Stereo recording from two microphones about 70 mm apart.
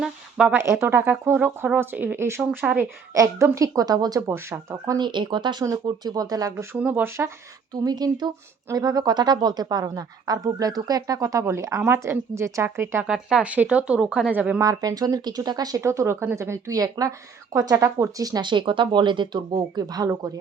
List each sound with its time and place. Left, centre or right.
0.0 s a sound: centre
0.6 s speech: right
2.1 s speech: right
3.5 s a woman's voice: right
4.9 s speech: right
5.8 s a woman's voice: right
6.7 s speech: right
7.7 s a woman's voice: right
11.4 s speech: right
13.1 s speech: centre
13.4 s speech: right
14.6 s a woman's voice: right
15.8 s a woman's voice: right